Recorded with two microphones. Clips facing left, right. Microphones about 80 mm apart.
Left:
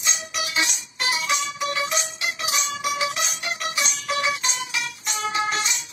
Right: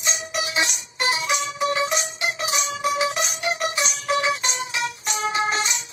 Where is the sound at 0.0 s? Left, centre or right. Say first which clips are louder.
Right 2 dB; right.